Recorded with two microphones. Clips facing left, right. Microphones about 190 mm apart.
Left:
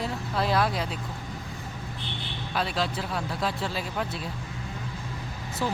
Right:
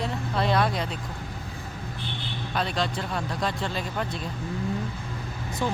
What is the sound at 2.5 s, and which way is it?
Speech, 5° left (ahead or behind).